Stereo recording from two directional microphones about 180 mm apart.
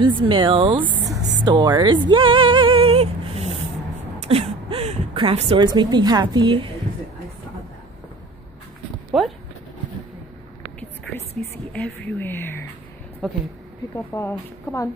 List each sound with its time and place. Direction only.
0.0 s speech: 30° right (ahead or behind)
4.2 s a sound: 35° right (ahead or behind)
5.7 s speech: 25° right (ahead or behind)
9.1 s a sound: centre (ahead or behind)
11.7 s a woman's voice: 10° left (ahead or behind)
13.9 s speech: 15° left (ahead or behind)